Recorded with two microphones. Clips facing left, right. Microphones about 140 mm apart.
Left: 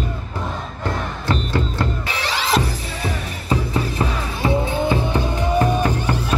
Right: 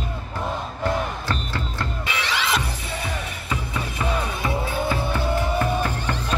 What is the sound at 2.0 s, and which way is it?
Music, 35° left (ahead or behind).